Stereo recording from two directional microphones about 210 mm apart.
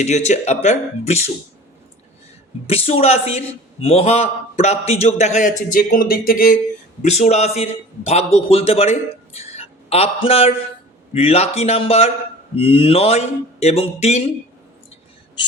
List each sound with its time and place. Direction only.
0.0 s a man's voice: 35° left (ahead or behind)
2.6 s a man's voice: 30° left (ahead or behind)
7.0 s a man's voice: 30° left (ahead or behind)